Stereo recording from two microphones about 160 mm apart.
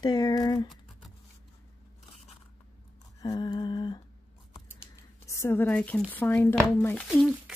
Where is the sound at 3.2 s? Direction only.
25° left (ahead or behind).